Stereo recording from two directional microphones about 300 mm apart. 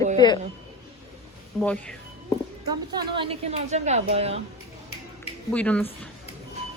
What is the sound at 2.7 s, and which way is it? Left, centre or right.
A woman's voice, centre.